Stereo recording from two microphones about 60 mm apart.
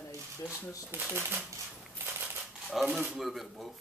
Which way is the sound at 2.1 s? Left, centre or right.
Right.